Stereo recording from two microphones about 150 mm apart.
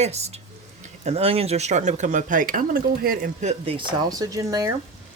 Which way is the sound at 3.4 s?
45° right (ahead or behind).